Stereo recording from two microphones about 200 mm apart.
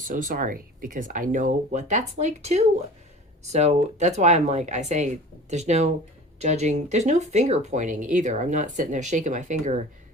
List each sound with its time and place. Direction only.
0.1 s speech: 45° right (ahead or behind)